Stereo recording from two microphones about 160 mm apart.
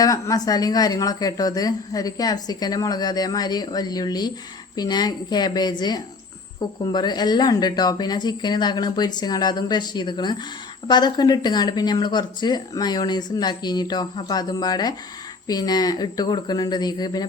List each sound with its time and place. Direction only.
0.0 s a woman's voice: 20° left (ahead or behind)